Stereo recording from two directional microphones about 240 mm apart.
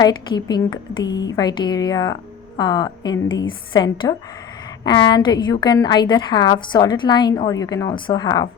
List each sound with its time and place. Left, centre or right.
0.0 s a woman's voice: centre